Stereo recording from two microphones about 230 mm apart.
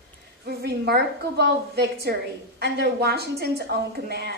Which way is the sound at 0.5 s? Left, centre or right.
Right.